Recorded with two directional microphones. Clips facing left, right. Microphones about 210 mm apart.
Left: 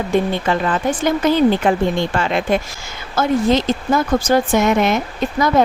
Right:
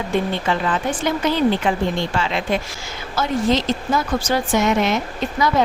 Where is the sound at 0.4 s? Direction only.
45° left (ahead or behind).